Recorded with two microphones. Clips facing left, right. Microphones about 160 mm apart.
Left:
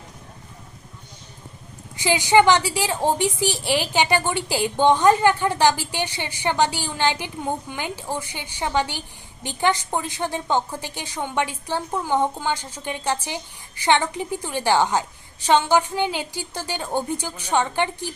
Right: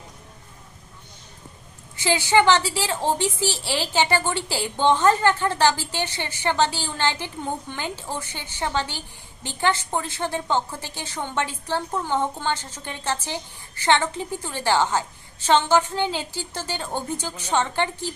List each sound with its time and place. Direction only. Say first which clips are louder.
2.0 s a woman's voice: left 3 dB; 15° left (ahead or behind)